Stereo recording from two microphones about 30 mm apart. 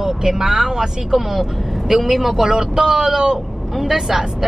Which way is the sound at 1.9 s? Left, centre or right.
Centre.